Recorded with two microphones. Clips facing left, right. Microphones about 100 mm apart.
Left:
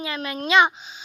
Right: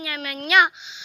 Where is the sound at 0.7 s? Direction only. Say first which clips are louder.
Left 1 dB; 40° left (ahead or behind).